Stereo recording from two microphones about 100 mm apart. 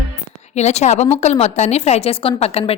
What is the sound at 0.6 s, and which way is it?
A woman's voice, 90° left.